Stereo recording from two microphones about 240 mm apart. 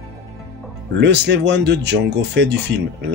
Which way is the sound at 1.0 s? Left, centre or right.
Right.